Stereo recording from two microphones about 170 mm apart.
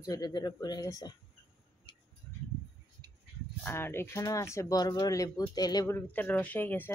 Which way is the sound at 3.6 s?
15° left (ahead or behind).